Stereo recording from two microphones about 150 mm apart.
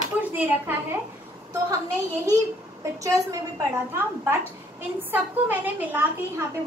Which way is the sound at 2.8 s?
20° right (ahead or behind).